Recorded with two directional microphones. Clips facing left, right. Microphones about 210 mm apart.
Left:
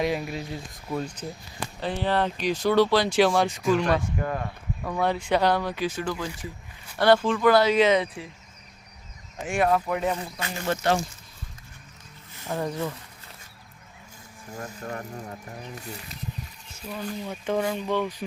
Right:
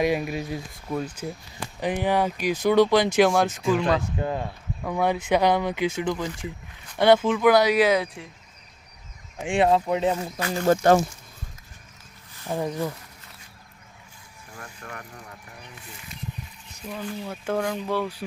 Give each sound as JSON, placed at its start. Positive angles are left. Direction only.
{"t": 0.0, "sound": "speech", "side_deg": -10}
{"t": 4.2, "sound": "speech", "side_deg": -25}
{"t": 4.8, "sound": "speech", "side_deg": -10}
{"t": 9.5, "sound": "speech", "side_deg": -25}
{"t": 10.5, "sound": "speech", "side_deg": -45}
{"t": 12.5, "sound": "speech", "side_deg": -15}
{"t": 14.8, "sound": "speech", "side_deg": 35}
{"t": 16.9, "sound": "speech", "side_deg": -10}